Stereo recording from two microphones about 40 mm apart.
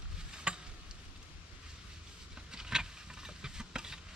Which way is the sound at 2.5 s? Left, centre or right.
Centre.